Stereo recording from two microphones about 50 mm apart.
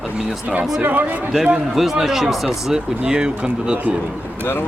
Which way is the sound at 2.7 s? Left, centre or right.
Centre.